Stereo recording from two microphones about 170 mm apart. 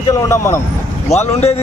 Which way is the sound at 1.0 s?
40° left (ahead or behind).